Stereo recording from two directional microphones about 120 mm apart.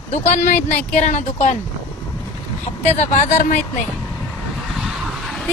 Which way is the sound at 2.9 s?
80° left.